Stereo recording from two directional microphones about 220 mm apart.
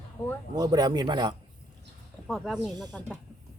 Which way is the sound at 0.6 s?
20° right (ahead or behind).